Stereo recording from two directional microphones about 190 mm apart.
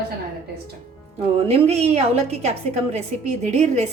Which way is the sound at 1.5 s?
35° right (ahead or behind).